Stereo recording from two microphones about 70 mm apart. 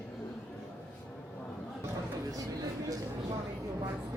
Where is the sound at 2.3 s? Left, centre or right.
Right.